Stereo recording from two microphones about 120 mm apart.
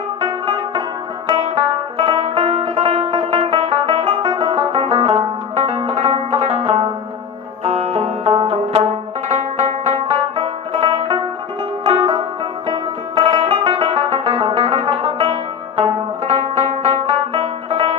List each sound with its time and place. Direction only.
0.2 s music: 40° right (ahead or behind)
2.0 s music: 45° right (ahead or behind)
7.6 s banjo: 60° right (ahead or behind); by 11.2 s 45° right (ahead or behind)
11.8 s music: 45° right (ahead or behind)